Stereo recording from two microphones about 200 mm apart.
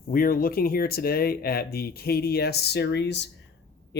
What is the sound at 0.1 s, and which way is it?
Speech, 45° left (ahead or behind).